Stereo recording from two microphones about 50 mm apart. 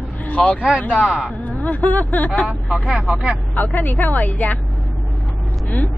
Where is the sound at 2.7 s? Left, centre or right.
Right.